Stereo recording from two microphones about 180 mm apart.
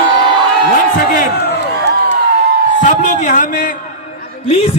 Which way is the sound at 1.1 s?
60° left (ahead or behind).